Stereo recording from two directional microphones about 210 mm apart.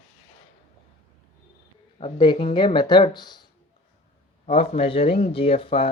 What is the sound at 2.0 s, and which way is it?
Speech, 20° left (ahead or behind).